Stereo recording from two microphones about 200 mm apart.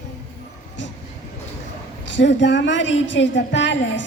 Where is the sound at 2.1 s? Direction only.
65° left (ahead or behind).